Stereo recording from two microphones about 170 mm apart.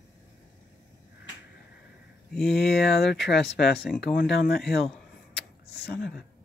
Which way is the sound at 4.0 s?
80° left.